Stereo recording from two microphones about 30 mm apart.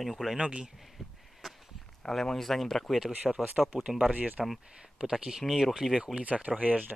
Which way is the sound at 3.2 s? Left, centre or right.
Centre.